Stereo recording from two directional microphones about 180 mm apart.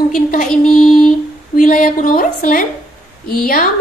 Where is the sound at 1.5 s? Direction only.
50° left (ahead or behind).